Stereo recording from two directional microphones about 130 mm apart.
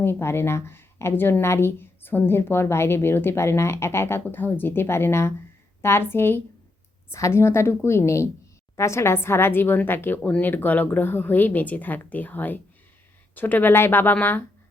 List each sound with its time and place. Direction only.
0.0 s a woman's voice: 15° left (ahead or behind)